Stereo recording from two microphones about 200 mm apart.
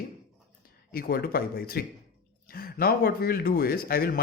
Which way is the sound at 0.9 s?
50° left (ahead or behind).